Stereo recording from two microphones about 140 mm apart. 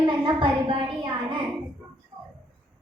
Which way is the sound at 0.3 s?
40° right (ahead or behind).